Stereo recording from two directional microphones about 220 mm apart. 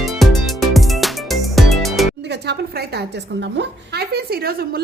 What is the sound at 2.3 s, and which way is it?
A woman's voice, 50° right (ahead or behind).